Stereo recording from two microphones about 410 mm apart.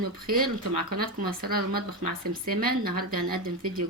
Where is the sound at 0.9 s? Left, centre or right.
Right.